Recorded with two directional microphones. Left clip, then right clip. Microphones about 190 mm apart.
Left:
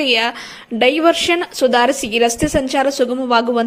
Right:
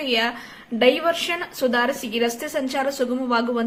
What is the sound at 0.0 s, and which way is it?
A woman's voice, 45° left (ahead or behind).